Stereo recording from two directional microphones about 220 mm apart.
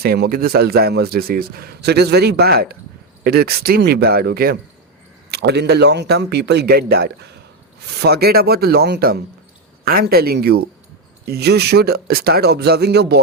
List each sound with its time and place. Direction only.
0.0 s a man's voice: 45° right (ahead or behind)